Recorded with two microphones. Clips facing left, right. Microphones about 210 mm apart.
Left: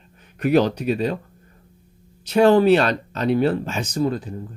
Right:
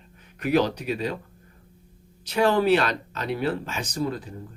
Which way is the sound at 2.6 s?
25° left (ahead or behind).